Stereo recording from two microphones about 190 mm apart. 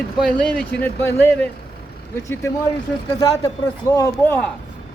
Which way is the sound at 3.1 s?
20° left (ahead or behind).